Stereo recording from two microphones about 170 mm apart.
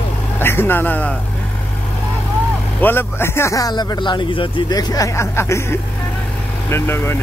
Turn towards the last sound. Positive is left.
turn(degrees=15)  # may be behind; listen again after turning